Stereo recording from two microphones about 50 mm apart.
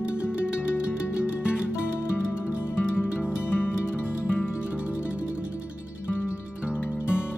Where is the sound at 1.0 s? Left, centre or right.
Left.